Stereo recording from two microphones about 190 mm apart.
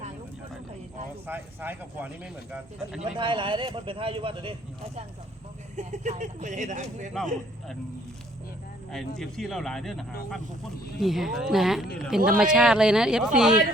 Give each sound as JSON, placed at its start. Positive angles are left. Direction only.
{"t": 1.3, "sound": "speech", "side_deg": -10}
{"t": 3.0, "sound": "speech", "side_deg": -25}
{"t": 8.9, "sound": "speech", "side_deg": 0}